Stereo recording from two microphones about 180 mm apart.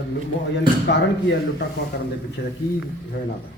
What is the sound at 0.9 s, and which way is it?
Speech, 75° left (ahead or behind).